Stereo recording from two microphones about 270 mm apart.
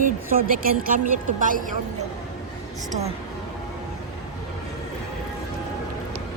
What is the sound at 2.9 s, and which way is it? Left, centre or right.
Speech, right.